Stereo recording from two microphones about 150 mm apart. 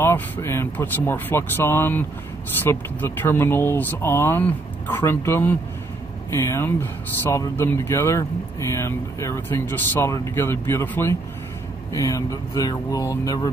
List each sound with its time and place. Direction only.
0.0 s speech: 15° left (ahead or behind)